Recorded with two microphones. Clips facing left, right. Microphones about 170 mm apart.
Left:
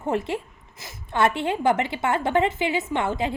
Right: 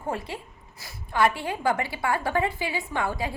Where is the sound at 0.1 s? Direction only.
25° left (ahead or behind).